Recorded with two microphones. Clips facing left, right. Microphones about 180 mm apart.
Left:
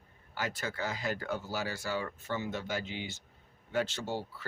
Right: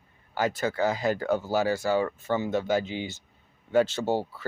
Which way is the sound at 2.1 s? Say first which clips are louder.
Right 9 dB; 90° right.